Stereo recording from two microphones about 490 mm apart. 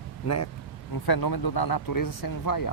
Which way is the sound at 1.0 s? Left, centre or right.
Left.